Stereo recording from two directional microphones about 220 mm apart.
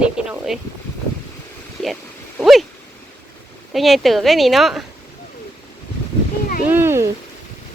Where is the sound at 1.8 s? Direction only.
Centre (ahead or behind).